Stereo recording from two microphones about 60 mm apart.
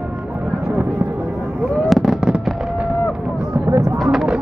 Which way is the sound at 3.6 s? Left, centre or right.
Right.